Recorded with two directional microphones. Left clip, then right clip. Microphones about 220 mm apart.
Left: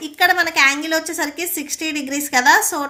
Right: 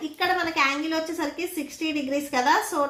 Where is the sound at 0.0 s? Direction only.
45° left (ahead or behind).